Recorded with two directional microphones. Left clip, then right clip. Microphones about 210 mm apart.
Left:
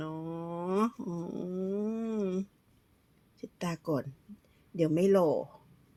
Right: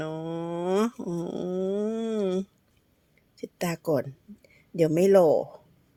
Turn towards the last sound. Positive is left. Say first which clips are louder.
# right 7 dB
turn(degrees=-55)  # may be behind; listen again after turning